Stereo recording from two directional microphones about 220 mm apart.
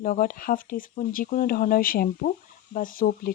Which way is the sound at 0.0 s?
40° left (ahead or behind).